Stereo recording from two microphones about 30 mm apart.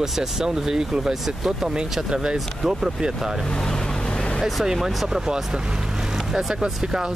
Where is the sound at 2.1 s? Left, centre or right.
Right.